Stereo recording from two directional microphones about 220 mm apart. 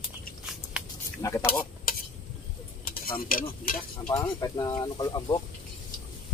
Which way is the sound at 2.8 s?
40° left (ahead or behind).